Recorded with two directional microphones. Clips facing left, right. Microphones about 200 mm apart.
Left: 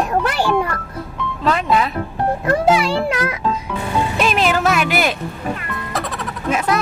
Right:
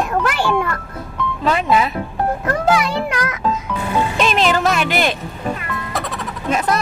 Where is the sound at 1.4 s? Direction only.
5° right (ahead or behind).